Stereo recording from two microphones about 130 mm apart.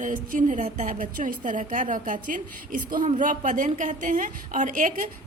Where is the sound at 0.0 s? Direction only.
80° right.